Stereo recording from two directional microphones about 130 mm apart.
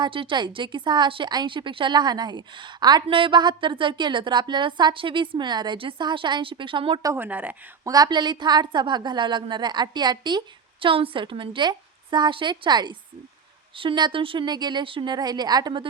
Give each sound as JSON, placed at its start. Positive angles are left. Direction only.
{"t": 0.0, "sound": "a woman's voice", "side_deg": -40}
{"t": 7.0, "sound": "a woman's voice", "side_deg": -25}
{"t": 7.3, "sound": "speech", "side_deg": -10}
{"t": 7.9, "sound": "a woman's voice", "side_deg": -30}